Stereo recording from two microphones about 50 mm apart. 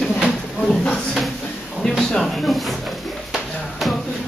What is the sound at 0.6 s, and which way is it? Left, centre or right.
Speech, centre.